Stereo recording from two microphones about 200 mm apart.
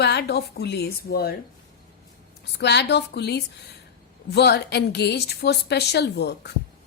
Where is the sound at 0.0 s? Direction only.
55° left (ahead or behind).